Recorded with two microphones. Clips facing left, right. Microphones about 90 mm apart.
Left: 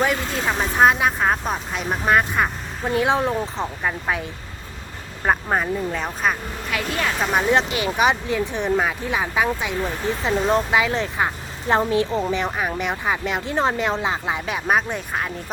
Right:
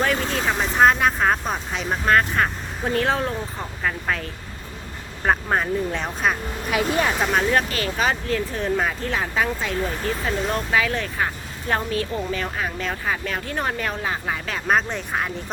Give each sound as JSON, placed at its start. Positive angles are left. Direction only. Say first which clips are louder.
{"t": 0.0, "sound": "speech", "louder": "even", "side_deg": 5}
{"t": 3.2, "sound": "speech", "louder": "left 4 dB", "side_deg": 20}
{"t": 6.7, "sound": "speech", "louder": "right 3 dB", "side_deg": -20}
{"t": 7.2, "sound": "speech", "louder": "left 1 dB", "side_deg": 10}